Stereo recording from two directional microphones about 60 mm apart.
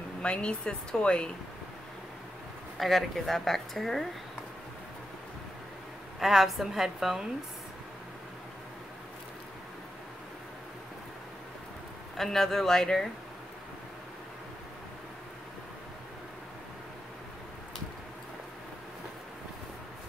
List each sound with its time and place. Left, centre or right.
0.2 s speech: centre
2.8 s speech: centre
6.1 s speech: centre
12.2 s speech: centre